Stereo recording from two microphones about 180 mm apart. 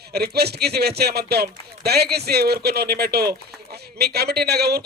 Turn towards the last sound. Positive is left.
turn(degrees=-60)  # may be behind; listen again after turning